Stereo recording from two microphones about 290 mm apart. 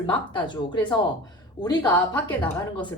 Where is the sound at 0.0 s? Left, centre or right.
Centre.